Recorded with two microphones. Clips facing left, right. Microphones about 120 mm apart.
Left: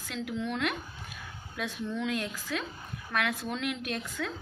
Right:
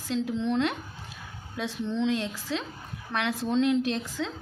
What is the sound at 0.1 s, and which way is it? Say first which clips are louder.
A woman's voice: right 6 dB; 30° right (ahead or behind).